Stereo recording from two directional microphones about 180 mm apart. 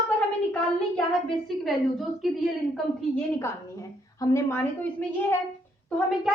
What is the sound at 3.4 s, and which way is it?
A woman's voice, 15° left (ahead or behind).